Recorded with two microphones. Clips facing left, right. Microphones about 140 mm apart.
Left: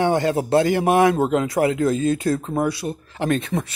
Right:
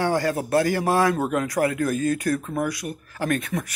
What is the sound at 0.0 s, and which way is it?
A man's voice, 20° left (ahead or behind).